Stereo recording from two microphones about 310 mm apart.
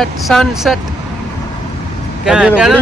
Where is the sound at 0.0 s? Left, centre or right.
Centre.